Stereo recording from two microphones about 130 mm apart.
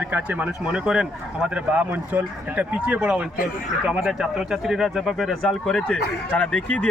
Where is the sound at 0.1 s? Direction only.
10° right (ahead or behind).